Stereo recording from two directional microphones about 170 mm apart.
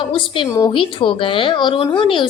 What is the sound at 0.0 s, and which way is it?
A woman's voice, 30° left (ahead or behind).